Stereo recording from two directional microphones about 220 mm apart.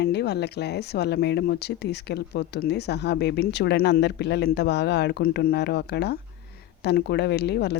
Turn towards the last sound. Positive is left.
turn(degrees=50)  # may be behind; listen again after turning